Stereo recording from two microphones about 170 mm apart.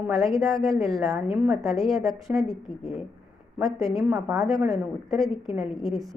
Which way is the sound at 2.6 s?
30° left (ahead or behind).